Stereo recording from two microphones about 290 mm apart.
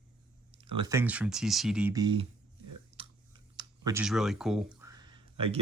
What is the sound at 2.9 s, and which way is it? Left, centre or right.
Chewing, right.